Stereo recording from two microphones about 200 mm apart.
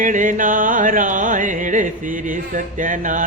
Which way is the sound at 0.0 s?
40° right (ahead or behind).